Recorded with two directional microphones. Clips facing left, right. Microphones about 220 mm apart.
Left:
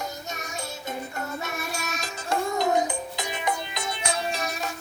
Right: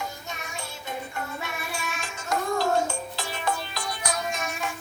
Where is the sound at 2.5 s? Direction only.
20° left (ahead or behind).